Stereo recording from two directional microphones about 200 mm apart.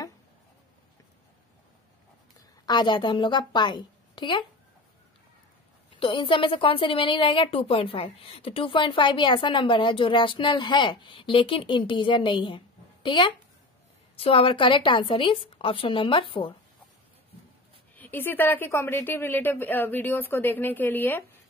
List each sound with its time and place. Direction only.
2.6 s a woman's voice: 20° left (ahead or behind)
5.9 s a woman's voice: 25° left (ahead or behind)
17.9 s a woman's voice: 10° left (ahead or behind)